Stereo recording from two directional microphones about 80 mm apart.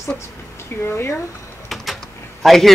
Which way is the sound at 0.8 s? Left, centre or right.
Left.